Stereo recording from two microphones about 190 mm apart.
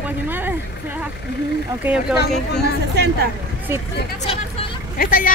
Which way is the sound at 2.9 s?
60° right (ahead or behind).